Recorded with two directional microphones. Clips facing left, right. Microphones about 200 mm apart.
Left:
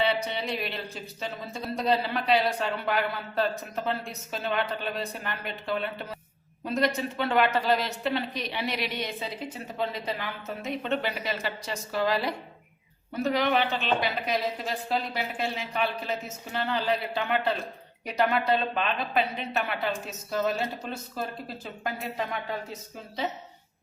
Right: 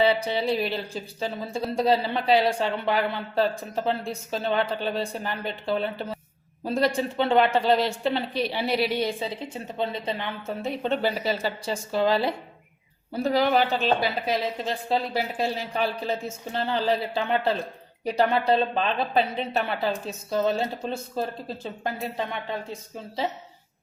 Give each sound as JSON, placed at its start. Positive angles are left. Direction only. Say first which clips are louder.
{"t": 0.0, "sound": "a woman's voice", "louder": "right 5 dB", "side_deg": -30}